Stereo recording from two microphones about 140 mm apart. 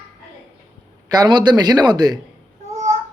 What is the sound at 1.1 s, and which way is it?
A man's voice, 30° right (ahead or behind).